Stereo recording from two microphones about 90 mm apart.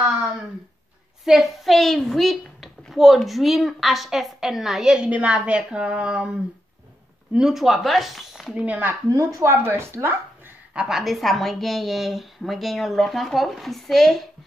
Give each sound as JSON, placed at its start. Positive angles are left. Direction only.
{"t": 1.2, "sound": "a woman's voice", "side_deg": 0}
{"t": 7.3, "sound": "a woman's voice", "side_deg": -5}
{"t": 8.6, "sound": "speech", "side_deg": -20}
{"t": 9.1, "sound": "speech", "side_deg": -35}
{"t": 10.7, "sound": "a woman's voice", "side_deg": -10}